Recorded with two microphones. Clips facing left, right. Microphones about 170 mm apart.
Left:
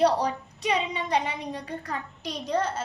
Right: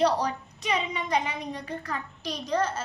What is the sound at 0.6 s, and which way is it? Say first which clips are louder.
A child's voice: left 2 dB; 35° left (ahead or behind).